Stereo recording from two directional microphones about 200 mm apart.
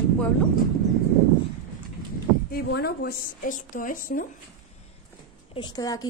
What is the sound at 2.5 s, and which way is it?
A woman's voice, 55° left (ahead or behind).